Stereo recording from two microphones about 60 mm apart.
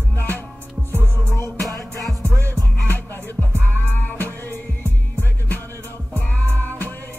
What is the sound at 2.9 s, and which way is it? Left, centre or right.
Music, left.